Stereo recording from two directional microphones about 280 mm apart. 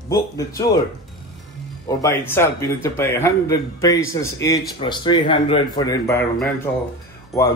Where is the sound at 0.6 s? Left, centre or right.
Centre.